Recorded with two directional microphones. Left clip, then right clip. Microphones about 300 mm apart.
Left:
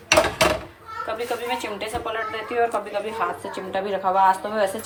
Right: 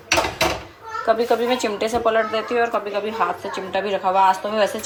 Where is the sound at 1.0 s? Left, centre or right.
Centre.